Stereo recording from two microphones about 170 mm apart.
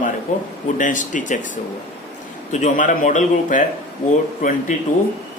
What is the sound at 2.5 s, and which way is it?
Speech, 45° left (ahead or behind).